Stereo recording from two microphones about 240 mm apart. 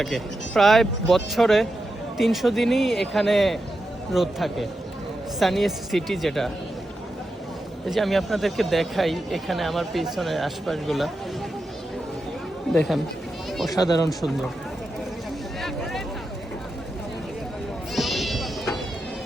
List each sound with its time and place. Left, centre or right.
0.0 s speech: centre
7.9 s speech: centre
12.7 s speech: centre
13.7 s speech: centre
14.1 s speech: centre
17.9 s cat: centre